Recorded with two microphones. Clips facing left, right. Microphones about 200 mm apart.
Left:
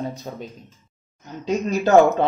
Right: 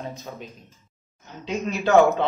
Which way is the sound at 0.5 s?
Centre (ahead or behind).